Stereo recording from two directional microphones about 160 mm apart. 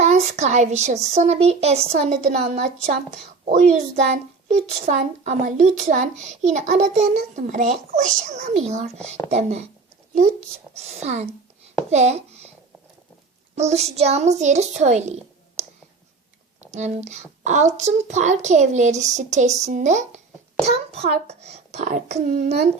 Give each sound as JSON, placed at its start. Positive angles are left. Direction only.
{"t": 0.0, "sound": "a woman's voice", "side_deg": -45}
{"t": 10.8, "sound": "a woman's voice", "side_deg": -40}
{"t": 13.6, "sound": "a woman's voice", "side_deg": -45}
{"t": 16.7, "sound": "a woman's voice", "side_deg": -45}